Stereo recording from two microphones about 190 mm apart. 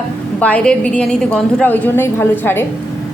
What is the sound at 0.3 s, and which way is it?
A woman's voice, 5° left (ahead or behind).